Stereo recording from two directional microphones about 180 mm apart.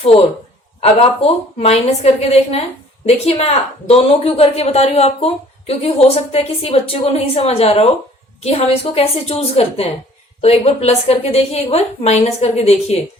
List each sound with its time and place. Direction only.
0.0 s speech: 35° left (ahead or behind)